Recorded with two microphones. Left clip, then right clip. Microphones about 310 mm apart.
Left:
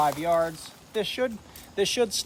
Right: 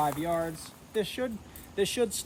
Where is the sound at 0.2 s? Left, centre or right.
Centre.